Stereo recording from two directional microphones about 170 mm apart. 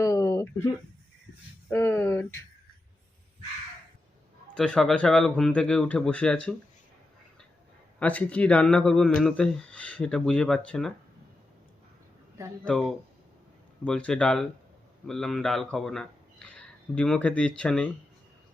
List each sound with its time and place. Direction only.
0.0 s a sound: 20° left (ahead or behind)
1.7 s speech: 15° left (ahead or behind)
4.5 s speech: 5° left (ahead or behind)
7.9 s speech: 10° left (ahead or behind)
12.6 s speech: 5° left (ahead or behind)